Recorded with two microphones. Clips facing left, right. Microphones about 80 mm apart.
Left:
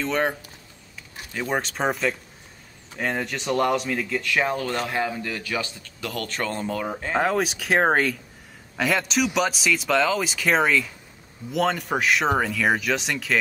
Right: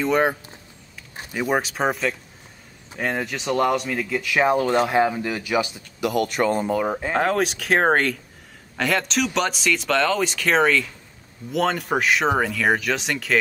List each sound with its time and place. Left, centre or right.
0.0 s a man's voice: centre
7.2 s a man's voice: centre